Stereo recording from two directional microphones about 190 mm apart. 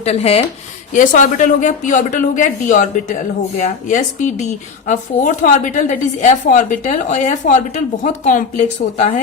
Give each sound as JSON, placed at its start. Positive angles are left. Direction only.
{"t": 0.0, "sound": "a woman's voice", "side_deg": 35}